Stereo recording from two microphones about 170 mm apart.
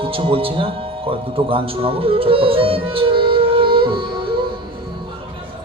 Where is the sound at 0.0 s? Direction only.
35° right (ahead or behind).